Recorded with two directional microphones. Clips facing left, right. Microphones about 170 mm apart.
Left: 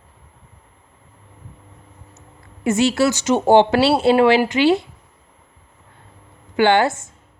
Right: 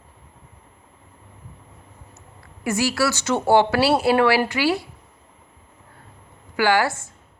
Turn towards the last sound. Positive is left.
turn(degrees=20)  # may be behind; listen again after turning